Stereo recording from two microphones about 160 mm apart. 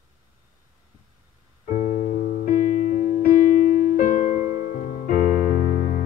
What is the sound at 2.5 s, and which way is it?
Music, 50° left (ahead or behind).